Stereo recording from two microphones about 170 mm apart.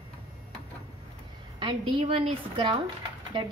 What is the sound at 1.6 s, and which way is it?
A woman's voice, 30° right (ahead or behind).